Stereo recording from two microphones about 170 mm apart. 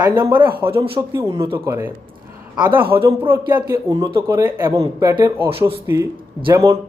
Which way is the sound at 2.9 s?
15° right (ahead or behind).